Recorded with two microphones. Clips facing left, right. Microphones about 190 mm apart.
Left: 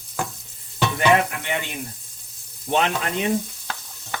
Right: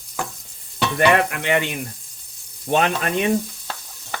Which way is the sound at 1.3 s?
75° right (ahead or behind).